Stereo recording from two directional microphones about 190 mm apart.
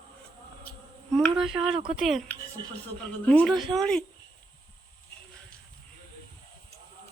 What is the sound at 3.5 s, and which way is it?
Speech, 25° right (ahead or behind).